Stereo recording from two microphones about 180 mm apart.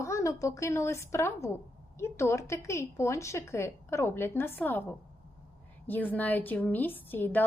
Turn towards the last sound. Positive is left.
turn(degrees=10)  # may be behind; listen again after turning